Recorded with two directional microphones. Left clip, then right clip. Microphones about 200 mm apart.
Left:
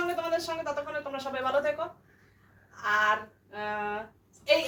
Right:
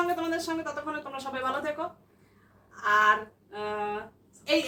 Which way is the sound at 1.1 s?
25° right (ahead or behind).